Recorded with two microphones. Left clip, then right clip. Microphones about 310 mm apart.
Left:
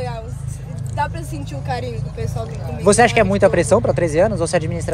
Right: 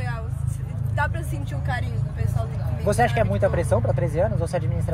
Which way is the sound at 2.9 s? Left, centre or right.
Left.